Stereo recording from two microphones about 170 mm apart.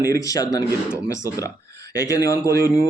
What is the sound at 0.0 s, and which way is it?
A man's voice, 20° left (ahead or behind).